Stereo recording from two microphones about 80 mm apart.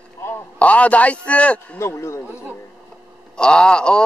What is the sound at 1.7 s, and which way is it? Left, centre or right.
Speech, left.